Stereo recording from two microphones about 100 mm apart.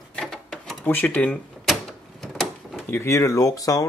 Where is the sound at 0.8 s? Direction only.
15° left (ahead or behind).